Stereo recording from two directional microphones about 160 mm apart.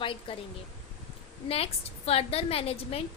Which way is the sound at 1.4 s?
40° left (ahead or behind).